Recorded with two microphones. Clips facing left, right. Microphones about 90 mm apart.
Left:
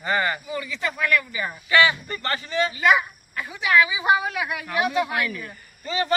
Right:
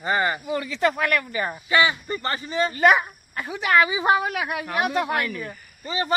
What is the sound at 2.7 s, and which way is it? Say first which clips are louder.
A woman's voice: right 3 dB; 45° right (ahead or behind).